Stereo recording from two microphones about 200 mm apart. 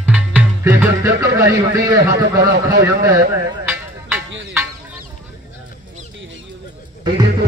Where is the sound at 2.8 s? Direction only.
15° right (ahead or behind).